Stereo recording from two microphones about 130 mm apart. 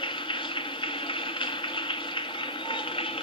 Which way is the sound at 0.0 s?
40° left (ahead or behind).